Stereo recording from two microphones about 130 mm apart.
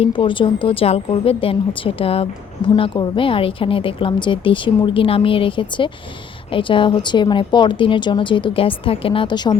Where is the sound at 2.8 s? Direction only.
35° left (ahead or behind).